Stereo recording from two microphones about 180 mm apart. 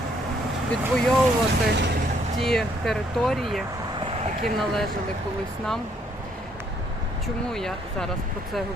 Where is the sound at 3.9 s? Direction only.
30° right (ahead or behind).